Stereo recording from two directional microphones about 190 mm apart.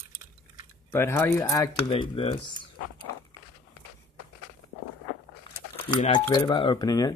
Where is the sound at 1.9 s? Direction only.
30° left (ahead or behind).